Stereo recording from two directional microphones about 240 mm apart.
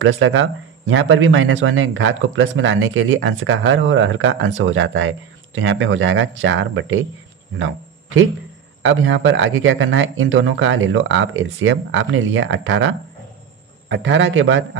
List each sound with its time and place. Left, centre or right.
0.0 s speech: right